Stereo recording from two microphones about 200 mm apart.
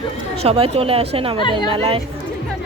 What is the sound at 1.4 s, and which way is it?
Speech, 25° left (ahead or behind).